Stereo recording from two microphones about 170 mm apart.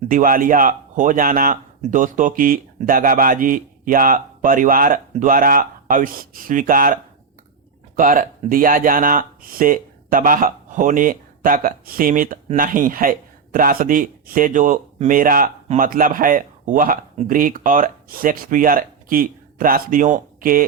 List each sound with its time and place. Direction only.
0.1 s a man's voice: 55° right (ahead or behind)